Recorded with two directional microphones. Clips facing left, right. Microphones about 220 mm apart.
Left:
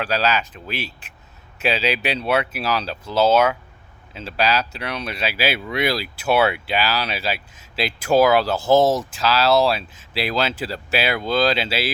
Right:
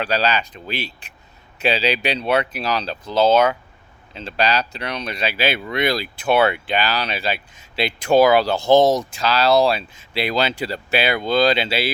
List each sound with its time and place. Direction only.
0.0 s speech: 5° left (ahead or behind)